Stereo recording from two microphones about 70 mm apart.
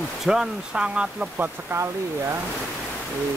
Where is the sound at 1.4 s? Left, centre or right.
Right.